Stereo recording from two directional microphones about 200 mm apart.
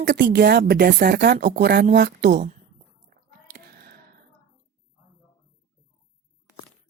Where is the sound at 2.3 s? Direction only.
40° right (ahead or behind).